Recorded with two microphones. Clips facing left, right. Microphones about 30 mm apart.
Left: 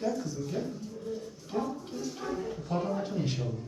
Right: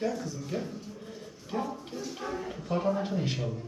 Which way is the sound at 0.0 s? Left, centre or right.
Right.